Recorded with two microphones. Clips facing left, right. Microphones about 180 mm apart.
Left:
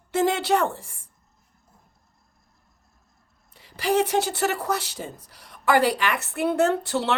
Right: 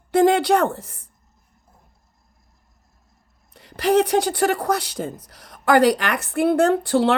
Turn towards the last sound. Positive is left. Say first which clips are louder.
# right 6 dB
turn(degrees=-45)  # may be behind; listen again after turning